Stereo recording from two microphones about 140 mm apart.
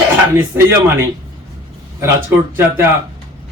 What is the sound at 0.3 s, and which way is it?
Speech, 15° right (ahead or behind).